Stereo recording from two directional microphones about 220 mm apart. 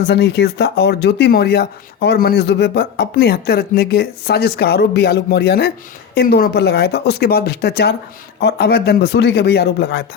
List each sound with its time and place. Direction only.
0.0 s speech: 50° left (ahead or behind)